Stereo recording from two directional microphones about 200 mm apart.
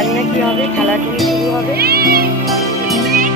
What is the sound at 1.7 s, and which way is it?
Music, 50° right (ahead or behind).